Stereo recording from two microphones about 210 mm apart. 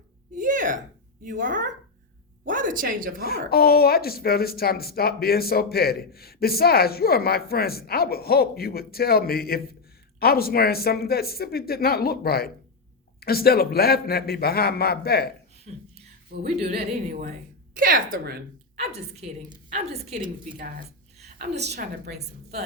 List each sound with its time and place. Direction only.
0.3 s a sound: 40° right (ahead or behind)
1.2 s a woman's voice: 40° right (ahead or behind)
3.2 s speech: 45° left (ahead or behind)
15.7 s a woman's voice: 35° right (ahead or behind)
18.8 s a woman's voice: 30° right (ahead or behind)
21.6 s a woman's voice: 50° right (ahead or behind)